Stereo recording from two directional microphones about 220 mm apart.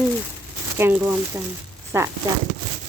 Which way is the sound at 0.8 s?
10° right (ahead or behind).